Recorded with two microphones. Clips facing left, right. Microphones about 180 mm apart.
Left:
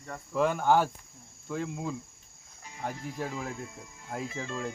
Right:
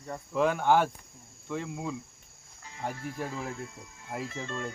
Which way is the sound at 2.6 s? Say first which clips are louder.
Right 1 dB; 15° left (ahead or behind).